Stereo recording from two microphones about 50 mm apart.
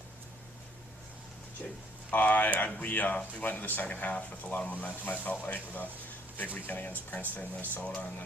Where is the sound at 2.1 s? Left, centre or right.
Left.